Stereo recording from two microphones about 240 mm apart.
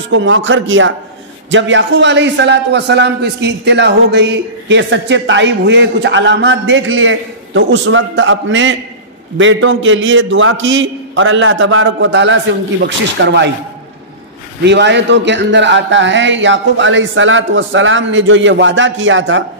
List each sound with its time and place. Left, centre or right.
0.1 s a man's voice: right
14.6 s a man's voice: right